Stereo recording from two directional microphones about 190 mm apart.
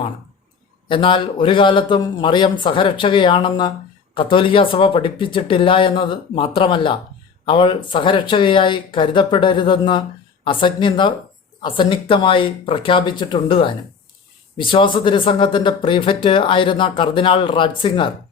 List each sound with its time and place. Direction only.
0.9 s speech: 25° left (ahead or behind)